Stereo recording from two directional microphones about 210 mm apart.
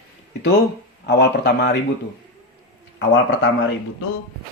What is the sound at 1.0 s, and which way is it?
Speech, 55° left (ahead or behind).